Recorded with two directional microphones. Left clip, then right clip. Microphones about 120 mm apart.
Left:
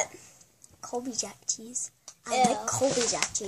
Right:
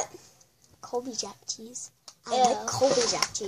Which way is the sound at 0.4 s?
20° left (ahead or behind).